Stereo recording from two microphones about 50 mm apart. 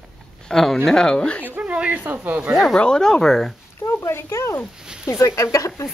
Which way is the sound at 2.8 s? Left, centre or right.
Centre.